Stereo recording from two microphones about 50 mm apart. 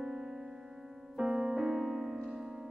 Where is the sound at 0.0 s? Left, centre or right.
Centre.